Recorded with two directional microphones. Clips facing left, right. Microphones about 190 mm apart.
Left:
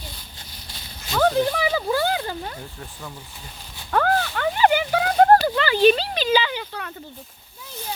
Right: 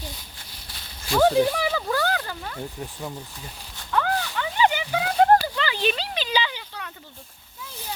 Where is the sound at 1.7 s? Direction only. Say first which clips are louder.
Left 3 dB; 15° left (ahead or behind).